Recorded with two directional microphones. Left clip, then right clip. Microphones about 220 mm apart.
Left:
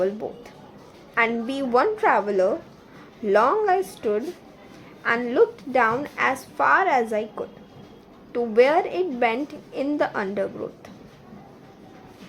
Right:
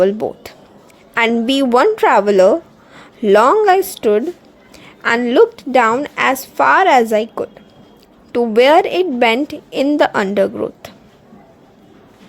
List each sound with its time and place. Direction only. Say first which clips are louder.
0.0 s a woman's voice: right 11 dB; 45° right (ahead or behind)